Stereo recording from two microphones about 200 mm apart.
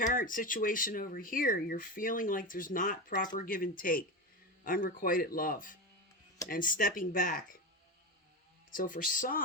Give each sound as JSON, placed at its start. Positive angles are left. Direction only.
{"t": 0.0, "sound": "speech", "side_deg": 40}
{"t": 8.7, "sound": "speech", "side_deg": 45}